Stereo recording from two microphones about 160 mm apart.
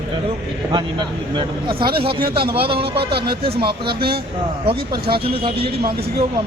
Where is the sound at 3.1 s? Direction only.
80° right.